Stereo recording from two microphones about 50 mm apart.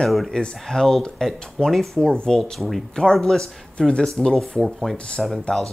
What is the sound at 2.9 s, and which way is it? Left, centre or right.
Speech, centre.